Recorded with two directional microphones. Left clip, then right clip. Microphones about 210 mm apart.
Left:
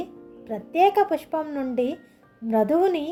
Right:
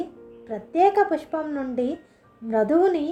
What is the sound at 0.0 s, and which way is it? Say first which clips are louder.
A woman's voice: right 2 dB; 35° left (ahead or behind).